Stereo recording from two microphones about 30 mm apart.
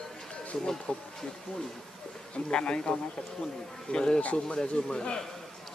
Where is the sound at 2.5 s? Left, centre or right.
Left.